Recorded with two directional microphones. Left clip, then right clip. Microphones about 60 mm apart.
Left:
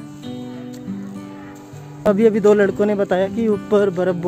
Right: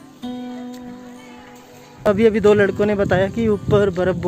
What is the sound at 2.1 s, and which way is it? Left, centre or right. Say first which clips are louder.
Speech: even; left.